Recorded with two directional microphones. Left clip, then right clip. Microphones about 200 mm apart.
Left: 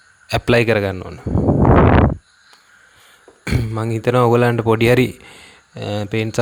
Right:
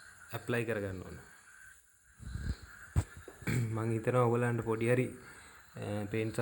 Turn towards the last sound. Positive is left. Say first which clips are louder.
# left 15 dB
turn(degrees=40)  # may be behind; listen again after turning